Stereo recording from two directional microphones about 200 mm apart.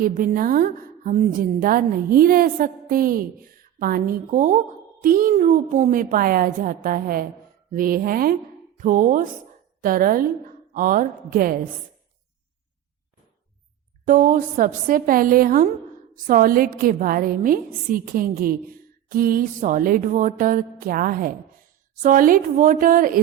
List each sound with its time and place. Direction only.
0.0 s a woman's voice: 45° right (ahead or behind)
14.0 s a woman's voice: 40° right (ahead or behind)